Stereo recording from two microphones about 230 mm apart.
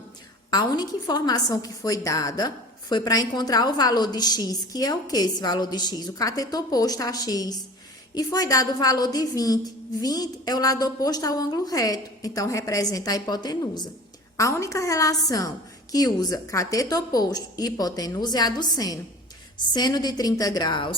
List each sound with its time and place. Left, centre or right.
0.5 s a woman's voice: centre